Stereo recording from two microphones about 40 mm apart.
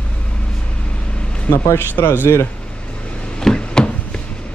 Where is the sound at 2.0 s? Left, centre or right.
Left.